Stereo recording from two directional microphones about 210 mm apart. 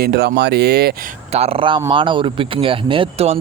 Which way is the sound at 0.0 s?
50° right (ahead or behind).